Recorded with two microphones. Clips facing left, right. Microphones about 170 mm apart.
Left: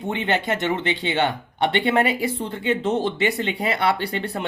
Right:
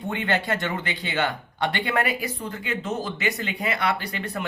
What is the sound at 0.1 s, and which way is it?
Speech, 20° left (ahead or behind).